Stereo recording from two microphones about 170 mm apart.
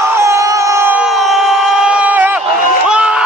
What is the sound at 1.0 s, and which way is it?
Crowd, centre (ahead or behind).